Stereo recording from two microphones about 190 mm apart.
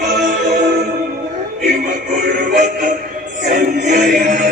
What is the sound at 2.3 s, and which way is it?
Music, 45° right (ahead or behind).